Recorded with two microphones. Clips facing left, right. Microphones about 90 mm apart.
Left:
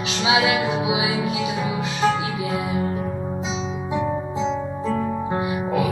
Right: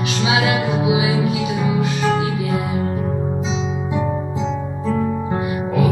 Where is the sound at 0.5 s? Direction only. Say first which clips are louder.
Right 3 dB; 20° left (ahead or behind).